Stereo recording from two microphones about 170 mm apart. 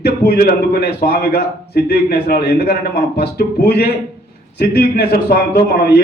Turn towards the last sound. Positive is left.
turn(degrees=65)  # may be behind; listen again after turning